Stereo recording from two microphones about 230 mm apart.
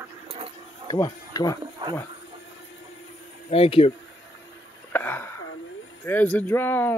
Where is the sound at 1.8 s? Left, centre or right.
Right.